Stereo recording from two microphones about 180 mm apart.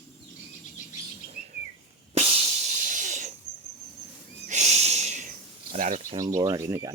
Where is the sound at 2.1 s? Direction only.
35° right (ahead or behind).